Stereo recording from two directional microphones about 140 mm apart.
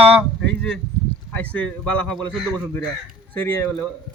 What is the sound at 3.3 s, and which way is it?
Speech, 15° left (ahead or behind).